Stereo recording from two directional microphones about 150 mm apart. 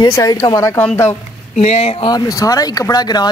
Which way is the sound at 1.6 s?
50° left (ahead or behind).